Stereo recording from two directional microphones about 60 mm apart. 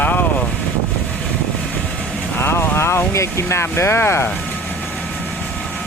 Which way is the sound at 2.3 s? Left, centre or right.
Left.